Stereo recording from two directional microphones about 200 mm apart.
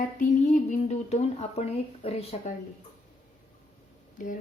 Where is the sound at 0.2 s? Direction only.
40° left (ahead or behind).